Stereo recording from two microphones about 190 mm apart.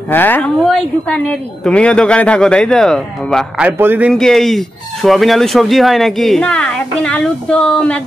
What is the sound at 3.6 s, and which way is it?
Speech, 10° right (ahead or behind).